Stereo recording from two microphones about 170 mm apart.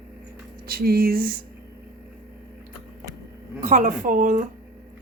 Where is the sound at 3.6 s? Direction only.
50° right (ahead or behind).